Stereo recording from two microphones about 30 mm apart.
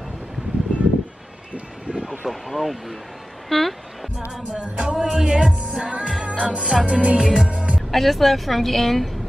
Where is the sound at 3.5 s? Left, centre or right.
Centre.